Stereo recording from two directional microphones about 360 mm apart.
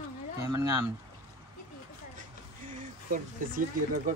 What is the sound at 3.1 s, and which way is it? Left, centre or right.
Speech, right.